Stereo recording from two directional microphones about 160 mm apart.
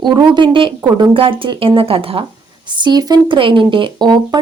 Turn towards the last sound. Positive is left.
turn(degrees=-25)  # may be behind; listen again after turning